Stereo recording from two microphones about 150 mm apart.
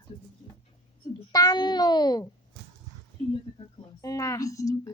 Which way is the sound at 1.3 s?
25° left (ahead or behind).